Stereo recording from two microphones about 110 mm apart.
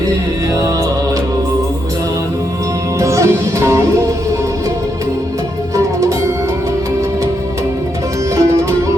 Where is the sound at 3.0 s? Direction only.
25° right (ahead or behind).